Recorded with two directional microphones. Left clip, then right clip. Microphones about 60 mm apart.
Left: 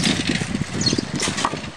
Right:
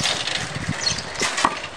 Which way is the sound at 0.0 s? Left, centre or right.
Left.